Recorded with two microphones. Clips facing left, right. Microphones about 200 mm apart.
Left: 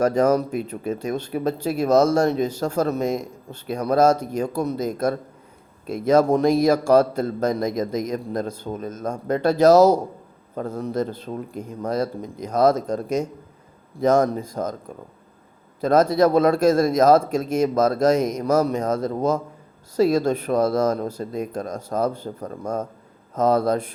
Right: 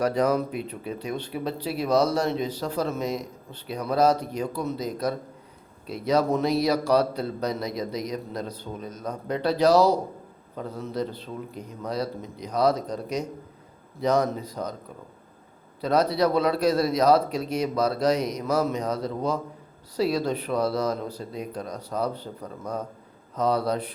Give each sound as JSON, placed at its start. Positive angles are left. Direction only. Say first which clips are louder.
{"t": 0.0, "sound": "speech", "louder": "left 5 dB", "side_deg": 45}